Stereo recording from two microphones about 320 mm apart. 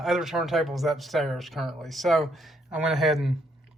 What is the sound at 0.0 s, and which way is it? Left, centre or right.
Speech, centre.